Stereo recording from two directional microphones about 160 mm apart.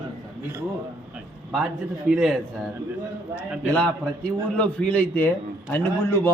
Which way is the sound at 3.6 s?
10° left (ahead or behind).